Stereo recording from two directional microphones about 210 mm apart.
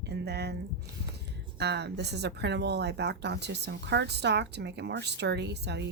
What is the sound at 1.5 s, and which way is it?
Speech, 55° right (ahead or behind).